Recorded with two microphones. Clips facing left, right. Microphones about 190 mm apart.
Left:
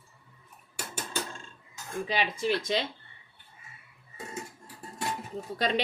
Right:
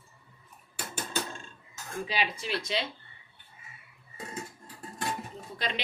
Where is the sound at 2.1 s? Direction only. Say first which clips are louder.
Left 4 dB; 50° left (ahead or behind).